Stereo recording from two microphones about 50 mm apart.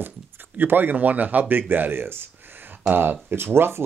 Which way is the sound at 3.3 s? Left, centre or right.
Right.